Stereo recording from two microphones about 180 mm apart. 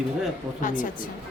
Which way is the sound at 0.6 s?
45° left (ahead or behind).